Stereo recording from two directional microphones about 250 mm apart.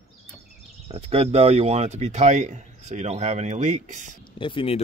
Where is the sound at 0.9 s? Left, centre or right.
Right.